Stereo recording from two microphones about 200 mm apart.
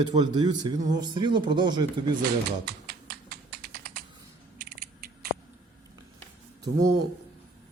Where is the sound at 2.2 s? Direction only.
50° right (ahead or behind).